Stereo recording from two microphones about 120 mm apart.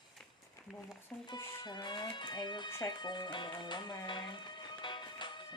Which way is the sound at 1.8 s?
40° left (ahead or behind).